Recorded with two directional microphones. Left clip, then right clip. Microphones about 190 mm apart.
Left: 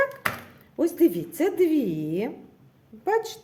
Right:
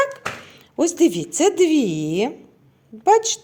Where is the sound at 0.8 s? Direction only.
20° right (ahead or behind).